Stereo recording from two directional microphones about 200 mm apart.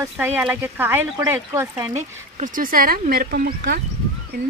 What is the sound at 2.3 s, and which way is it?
A woman's voice, 40° right (ahead or behind).